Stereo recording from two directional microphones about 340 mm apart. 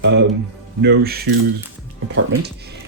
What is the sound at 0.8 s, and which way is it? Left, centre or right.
Speech, right.